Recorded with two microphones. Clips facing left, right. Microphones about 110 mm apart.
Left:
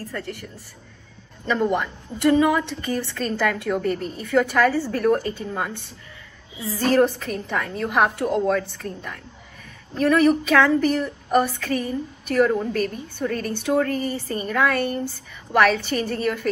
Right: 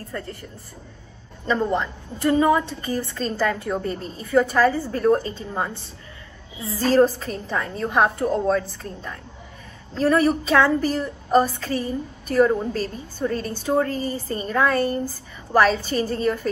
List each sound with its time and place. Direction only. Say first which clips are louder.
1.5 s a woman's voice: even; 30° right (ahead or behind)